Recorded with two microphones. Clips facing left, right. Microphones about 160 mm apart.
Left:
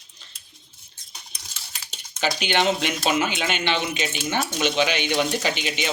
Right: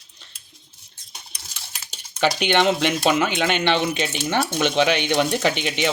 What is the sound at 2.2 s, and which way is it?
Speech, 60° right (ahead or behind).